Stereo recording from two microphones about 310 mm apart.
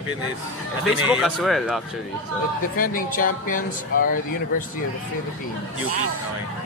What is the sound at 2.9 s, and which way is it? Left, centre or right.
Speech, left.